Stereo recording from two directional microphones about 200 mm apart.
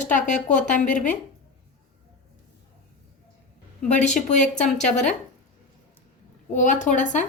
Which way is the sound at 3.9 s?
35° left (ahead or behind).